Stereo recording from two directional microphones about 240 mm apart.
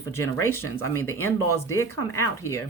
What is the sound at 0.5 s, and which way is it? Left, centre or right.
Speech, left.